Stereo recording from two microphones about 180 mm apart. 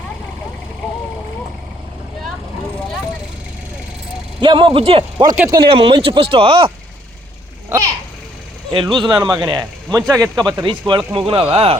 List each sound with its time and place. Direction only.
4.4 s speech: 25° right (ahead or behind)
5.6 s speech: 30° right (ahead or behind)
8.7 s speech: 25° right (ahead or behind)